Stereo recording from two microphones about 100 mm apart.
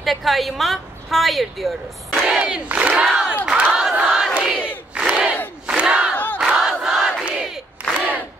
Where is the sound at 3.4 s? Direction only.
10° right (ahead or behind).